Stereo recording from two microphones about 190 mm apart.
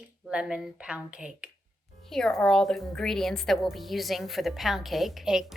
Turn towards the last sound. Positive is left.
turn(degrees=0)  # may be behind; listen again after turning